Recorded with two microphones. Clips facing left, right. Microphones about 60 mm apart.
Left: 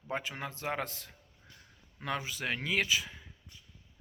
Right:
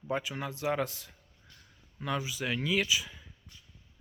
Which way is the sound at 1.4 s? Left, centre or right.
Left.